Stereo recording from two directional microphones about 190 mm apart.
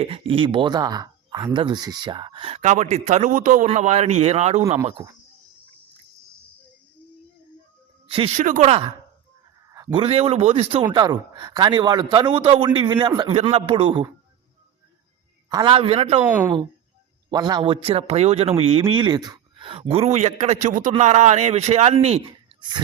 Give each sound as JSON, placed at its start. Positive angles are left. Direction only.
{"t": 0.0, "sound": "speech", "side_deg": -30}
{"t": 8.0, "sound": "music", "side_deg": -30}
{"t": 8.4, "sound": "speech", "side_deg": -40}
{"t": 9.7, "sound": "a sound", "side_deg": -15}
{"t": 10.0, "sound": "a man's voice", "side_deg": -30}
{"t": 15.4, "sound": "a man's voice", "side_deg": -20}
{"t": 16.2, "sound": "a woman's voice", "side_deg": -10}
{"t": 17.3, "sound": "speech", "side_deg": -20}